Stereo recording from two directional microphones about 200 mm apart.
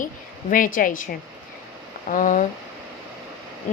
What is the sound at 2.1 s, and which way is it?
Speech, 40° left (ahead or behind).